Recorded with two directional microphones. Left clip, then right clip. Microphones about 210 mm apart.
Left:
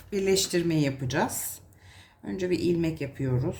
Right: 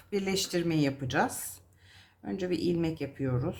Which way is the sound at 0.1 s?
20° right (ahead or behind).